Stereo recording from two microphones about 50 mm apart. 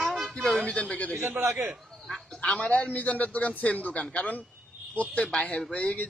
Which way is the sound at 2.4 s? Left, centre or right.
Left.